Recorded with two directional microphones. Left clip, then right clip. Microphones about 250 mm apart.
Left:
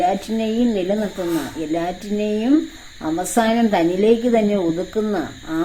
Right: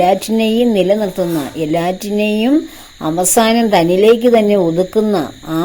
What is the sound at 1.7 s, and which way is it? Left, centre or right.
A woman's voice, right.